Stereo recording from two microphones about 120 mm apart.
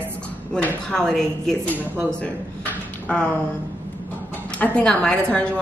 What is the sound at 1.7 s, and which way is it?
Speech, 15° right (ahead or behind).